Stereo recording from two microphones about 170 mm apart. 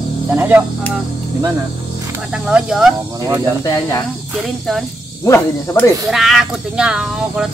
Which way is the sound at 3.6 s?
20° left (ahead or behind).